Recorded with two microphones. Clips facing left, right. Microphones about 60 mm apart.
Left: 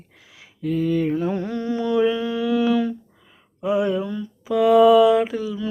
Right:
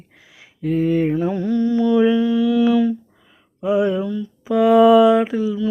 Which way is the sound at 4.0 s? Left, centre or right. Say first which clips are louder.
Right 4 dB; centre.